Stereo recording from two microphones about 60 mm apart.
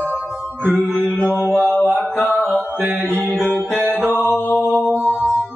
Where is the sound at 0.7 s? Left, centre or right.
Right.